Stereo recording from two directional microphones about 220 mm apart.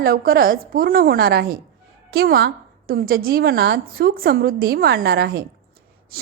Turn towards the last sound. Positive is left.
turn(degrees=-45)  # may be behind; listen again after turning